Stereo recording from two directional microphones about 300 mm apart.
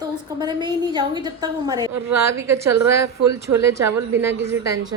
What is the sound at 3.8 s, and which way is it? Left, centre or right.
Speech, right.